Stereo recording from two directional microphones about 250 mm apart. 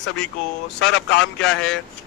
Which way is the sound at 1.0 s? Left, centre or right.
Left.